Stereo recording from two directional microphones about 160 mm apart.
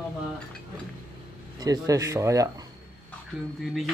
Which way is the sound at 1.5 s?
25° right (ahead or behind).